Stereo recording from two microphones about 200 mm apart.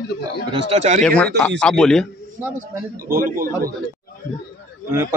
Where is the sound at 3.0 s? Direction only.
45° right (ahead or behind).